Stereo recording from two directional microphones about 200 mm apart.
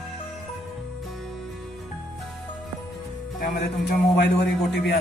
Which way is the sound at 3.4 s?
55° left (ahead or behind).